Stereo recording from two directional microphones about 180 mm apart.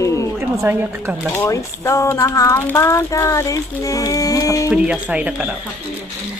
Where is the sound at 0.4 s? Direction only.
15° right (ahead or behind).